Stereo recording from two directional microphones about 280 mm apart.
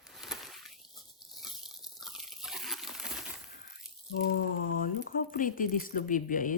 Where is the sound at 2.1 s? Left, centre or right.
Centre.